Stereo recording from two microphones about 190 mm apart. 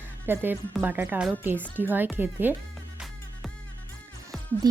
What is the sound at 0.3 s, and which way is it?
Speech, 10° right (ahead or behind).